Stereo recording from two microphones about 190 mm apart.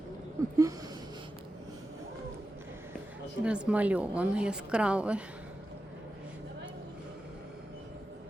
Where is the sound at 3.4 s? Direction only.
5° right (ahead or behind).